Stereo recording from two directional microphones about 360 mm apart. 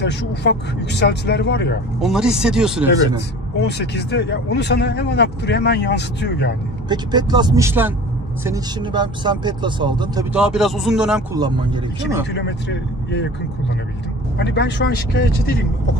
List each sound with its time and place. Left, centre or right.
0.0 s speech: left
2.0 s speech: centre
3.5 s speech: left
6.9 s speech: centre
12.3 s speech: left
14.4 s speech: left